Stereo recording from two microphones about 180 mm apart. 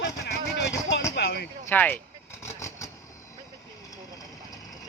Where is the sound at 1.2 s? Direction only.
60° left (ahead or behind).